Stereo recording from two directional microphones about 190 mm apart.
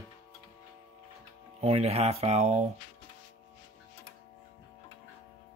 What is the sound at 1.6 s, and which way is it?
Speech, 35° right (ahead or behind).